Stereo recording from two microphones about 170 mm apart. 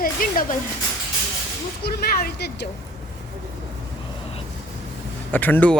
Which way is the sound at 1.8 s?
65° left (ahead or behind).